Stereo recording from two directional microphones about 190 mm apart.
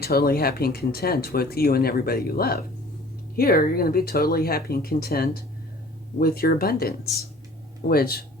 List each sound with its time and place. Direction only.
0.0 s speech: 55° left (ahead or behind)